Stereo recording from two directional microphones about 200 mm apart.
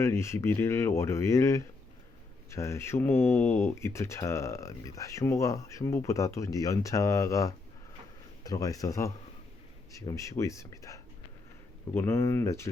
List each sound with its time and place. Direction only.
0.0 s speech: 15° left (ahead or behind)